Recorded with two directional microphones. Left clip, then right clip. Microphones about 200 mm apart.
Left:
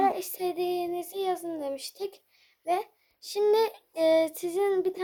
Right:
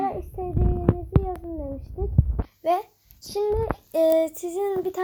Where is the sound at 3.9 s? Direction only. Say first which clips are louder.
Right 4 dB; 10° left (ahead or behind).